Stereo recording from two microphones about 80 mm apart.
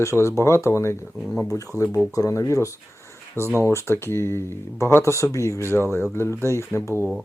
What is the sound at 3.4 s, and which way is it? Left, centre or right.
Speech, right.